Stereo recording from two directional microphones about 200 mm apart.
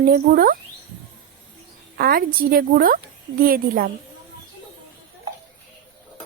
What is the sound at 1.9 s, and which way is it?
A woman's voice, 50° right (ahead or behind).